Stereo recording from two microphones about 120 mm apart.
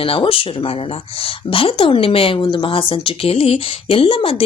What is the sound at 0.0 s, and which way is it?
Speech, 50° left (ahead or behind).